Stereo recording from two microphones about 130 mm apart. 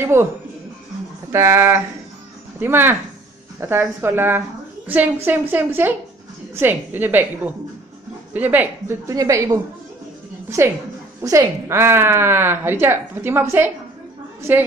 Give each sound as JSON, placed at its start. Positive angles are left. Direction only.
{"t": 0.0, "sound": "speech", "side_deg": -20}
{"t": 1.3, "sound": "a woman's voice", "side_deg": -20}
{"t": 11.1, "sound": "speech", "side_deg": -25}